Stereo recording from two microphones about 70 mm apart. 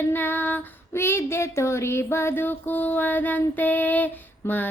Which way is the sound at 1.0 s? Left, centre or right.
Left.